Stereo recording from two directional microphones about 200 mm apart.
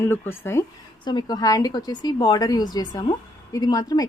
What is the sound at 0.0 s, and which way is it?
A woman's voice, 10° left (ahead or behind).